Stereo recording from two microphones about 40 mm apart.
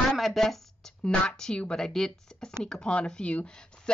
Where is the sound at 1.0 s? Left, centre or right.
Centre.